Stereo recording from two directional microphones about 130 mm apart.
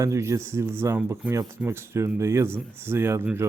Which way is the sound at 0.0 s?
25° right (ahead or behind).